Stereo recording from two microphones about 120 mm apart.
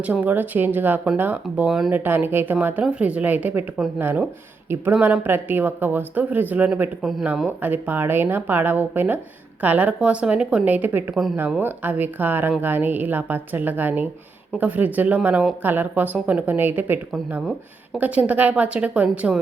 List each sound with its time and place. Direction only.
0.0 s speech: 15° right (ahead or behind)
1.9 s speech: 15° right (ahead or behind)
7.0 s speech: 5° right (ahead or behind)
7.6 s speech: 15° right (ahead or behind)